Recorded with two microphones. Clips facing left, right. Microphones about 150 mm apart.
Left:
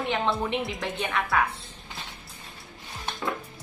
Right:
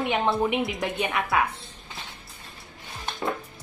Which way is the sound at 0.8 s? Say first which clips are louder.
Right 2 dB; 20° right (ahead or behind).